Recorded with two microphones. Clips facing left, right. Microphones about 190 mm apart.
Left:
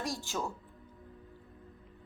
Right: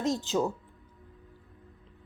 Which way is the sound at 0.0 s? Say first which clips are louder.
Right 8 dB; 20° right (ahead or behind).